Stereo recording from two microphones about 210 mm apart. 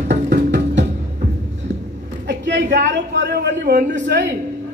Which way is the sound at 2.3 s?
55° right (ahead or behind).